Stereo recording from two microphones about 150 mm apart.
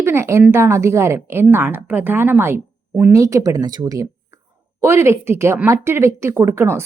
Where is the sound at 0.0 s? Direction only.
15° right (ahead or behind).